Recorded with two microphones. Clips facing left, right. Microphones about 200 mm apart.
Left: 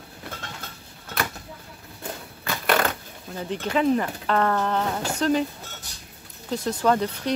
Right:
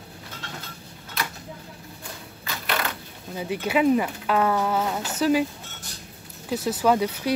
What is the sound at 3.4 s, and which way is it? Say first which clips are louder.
Speech: right 1 dB; 10° right (ahead or behind).